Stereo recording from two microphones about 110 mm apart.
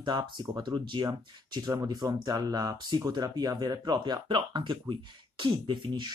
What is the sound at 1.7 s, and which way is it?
Speech, 25° right (ahead or behind).